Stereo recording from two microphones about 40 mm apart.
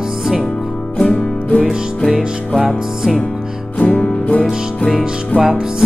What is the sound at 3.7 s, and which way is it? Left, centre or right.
Music, left.